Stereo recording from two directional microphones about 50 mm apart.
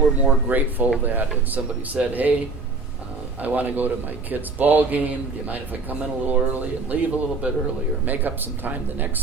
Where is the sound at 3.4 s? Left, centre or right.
Right.